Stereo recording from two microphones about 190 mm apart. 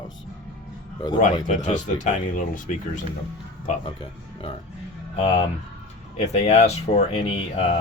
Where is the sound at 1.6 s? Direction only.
40° left (ahead or behind).